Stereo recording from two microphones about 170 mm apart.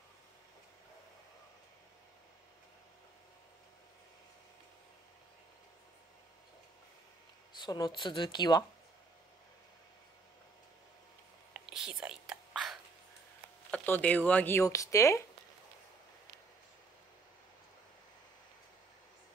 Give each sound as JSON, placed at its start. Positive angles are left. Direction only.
{"t": 7.6, "sound": "speech", "side_deg": 25}
{"t": 11.5, "sound": "whispering", "side_deg": -5}
{"t": 13.7, "sound": "speech", "side_deg": 10}